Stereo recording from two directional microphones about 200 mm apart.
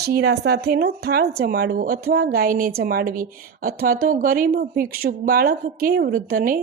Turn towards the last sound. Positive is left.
turn(degrees=-45)  # may be behind; listen again after turning